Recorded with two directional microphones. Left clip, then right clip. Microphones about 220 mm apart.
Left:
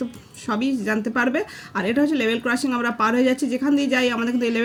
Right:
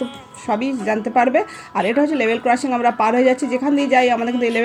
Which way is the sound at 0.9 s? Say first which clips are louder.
Right 8 dB; 50° right (ahead or behind).